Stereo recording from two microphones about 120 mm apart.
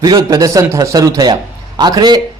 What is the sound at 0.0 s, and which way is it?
A man's voice, 35° right (ahead or behind).